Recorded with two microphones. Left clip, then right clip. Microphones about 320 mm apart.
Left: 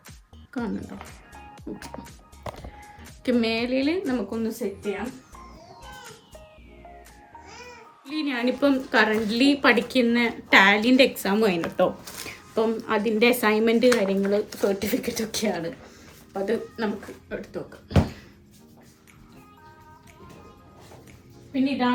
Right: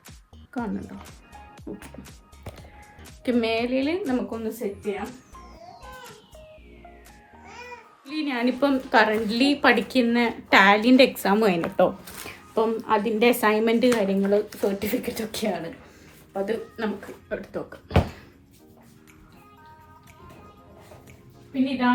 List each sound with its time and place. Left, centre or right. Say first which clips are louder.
0.5 s speech: even; centre
8.0 s a woman's voice: even; centre
17.9 s a sound: right 1 dB; centre